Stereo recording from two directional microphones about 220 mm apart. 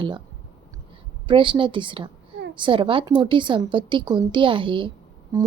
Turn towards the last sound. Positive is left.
turn(degrees=-15)  # may be behind; listen again after turning